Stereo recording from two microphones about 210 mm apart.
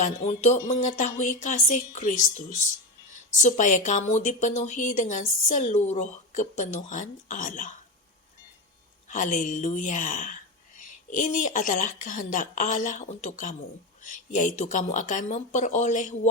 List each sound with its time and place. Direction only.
0.0 s a woman's voice: 35° left (ahead or behind)
3.3 s a woman's voice: 35° left (ahead or behind)
9.0 s a woman's voice: 35° left (ahead or behind)